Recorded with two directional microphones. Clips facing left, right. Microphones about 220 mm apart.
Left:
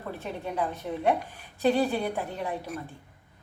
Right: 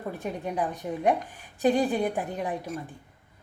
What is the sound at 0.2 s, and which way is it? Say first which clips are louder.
A woman's voice: right 1 dB; 15° right (ahead or behind).